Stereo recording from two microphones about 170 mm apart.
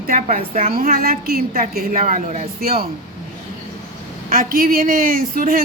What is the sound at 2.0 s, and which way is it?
Speech, 45° right (ahead or behind).